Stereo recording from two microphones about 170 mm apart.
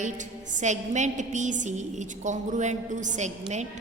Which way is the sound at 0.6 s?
45° right (ahead or behind).